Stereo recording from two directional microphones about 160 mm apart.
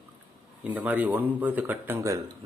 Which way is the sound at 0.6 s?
10° right (ahead or behind).